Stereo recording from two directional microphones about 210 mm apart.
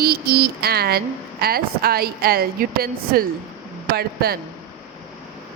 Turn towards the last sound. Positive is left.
turn(degrees=-45)  # may be behind; listen again after turning